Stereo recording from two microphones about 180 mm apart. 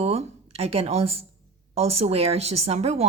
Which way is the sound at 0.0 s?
35° right (ahead or behind).